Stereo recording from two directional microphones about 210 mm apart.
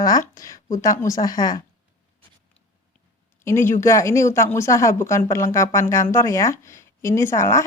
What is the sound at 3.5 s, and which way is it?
Speech, 10° left (ahead or behind).